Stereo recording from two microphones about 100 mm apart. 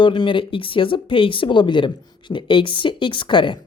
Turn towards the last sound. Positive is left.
turn(degrees=55)  # may be behind; listen again after turning